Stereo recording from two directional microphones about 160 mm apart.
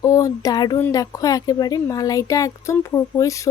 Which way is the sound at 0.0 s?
20° left (ahead or behind).